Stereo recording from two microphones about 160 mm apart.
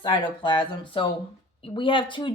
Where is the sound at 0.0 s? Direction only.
30° left (ahead or behind).